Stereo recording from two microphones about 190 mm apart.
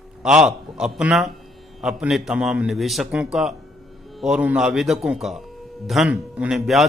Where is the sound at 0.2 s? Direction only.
5° right (ahead or behind).